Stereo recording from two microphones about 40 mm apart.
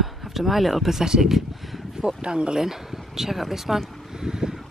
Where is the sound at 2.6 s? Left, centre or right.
Centre.